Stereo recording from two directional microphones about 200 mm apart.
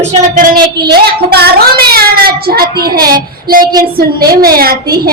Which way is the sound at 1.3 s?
50° right (ahead or behind).